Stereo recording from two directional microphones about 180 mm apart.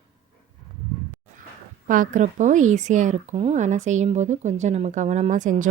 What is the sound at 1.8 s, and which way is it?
Speech, 50° right (ahead or behind).